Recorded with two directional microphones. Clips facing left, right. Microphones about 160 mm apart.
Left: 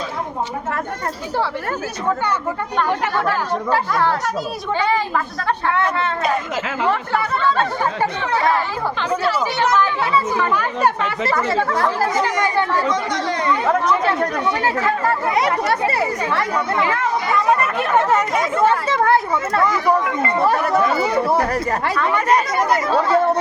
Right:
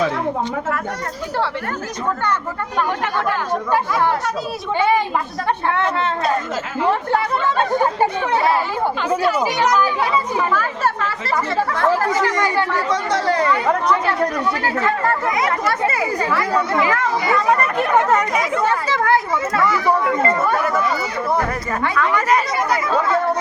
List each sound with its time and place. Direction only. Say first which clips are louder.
5.6 s speech: left 1 dB; 20° right (ahead or behind)
9.0 s speech: right 1 dB; 15° right (ahead or behind)
10.5 s speech: left 2 dB; 15° left (ahead or behind)
12.2 s speech: even; 20° left (ahead or behind)
14.8 s speech: even; 5° left (ahead or behind)
15.4 s speech: left 2 dB; 30° left (ahead or behind)
19.6 s speech: right 1 dB; 15° left (ahead or behind)
20.4 s speech: left 2 dB; 35° left (ahead or behind)